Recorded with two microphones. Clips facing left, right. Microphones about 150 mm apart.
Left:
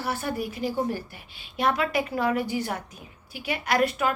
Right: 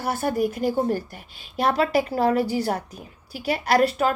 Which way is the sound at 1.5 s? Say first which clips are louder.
Right 4 dB; 35° right (ahead or behind).